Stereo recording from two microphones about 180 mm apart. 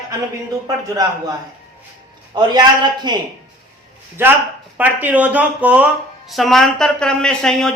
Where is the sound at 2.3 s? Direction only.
25° right (ahead or behind).